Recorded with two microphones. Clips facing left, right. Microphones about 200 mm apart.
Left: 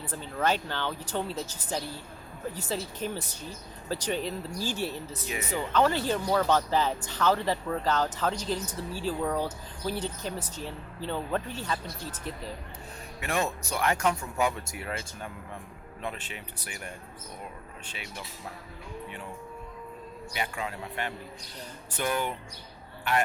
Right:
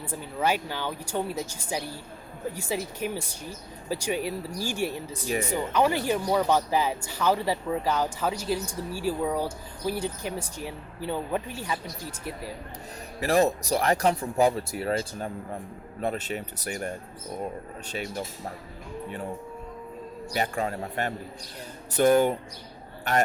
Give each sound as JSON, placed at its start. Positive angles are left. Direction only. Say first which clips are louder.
{"t": 0.1, "sound": "speech", "louder": "right 1 dB", "side_deg": -10}
{"t": 13.1, "sound": "speech", "louder": "right 8 dB", "side_deg": -35}
{"t": 20.3, "sound": "a man's voice", "louder": "right 6 dB", "side_deg": -45}